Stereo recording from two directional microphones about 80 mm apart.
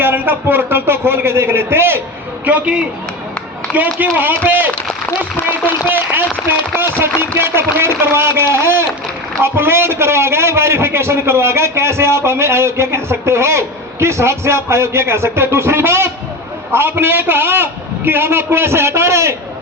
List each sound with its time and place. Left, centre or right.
0.0 s a man's voice: right
2.4 s a man's voice: centre; by 19.4 s right